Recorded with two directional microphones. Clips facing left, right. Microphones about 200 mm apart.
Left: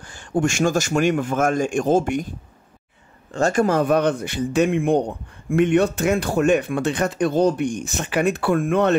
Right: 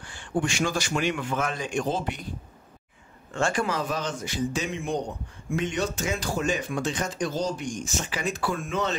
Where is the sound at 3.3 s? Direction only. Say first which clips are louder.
Left 8 dB; 45° left (ahead or behind); by 9.0 s 60° left (ahead or behind).